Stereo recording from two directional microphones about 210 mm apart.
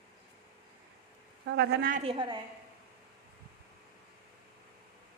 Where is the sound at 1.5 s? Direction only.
50° right (ahead or behind).